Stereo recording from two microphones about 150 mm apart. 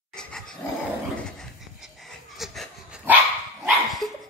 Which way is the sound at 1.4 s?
Centre (ahead or behind).